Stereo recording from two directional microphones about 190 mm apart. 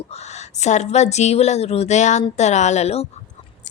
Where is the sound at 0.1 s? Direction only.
35° left (ahead or behind).